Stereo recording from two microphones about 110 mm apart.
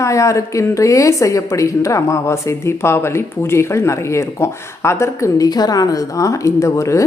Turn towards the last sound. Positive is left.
turn(degrees=25)  # may be behind; listen again after turning